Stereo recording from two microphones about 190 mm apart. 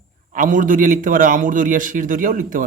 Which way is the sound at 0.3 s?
45° right (ahead or behind).